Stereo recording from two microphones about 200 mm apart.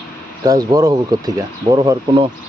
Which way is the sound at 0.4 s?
15° right (ahead or behind).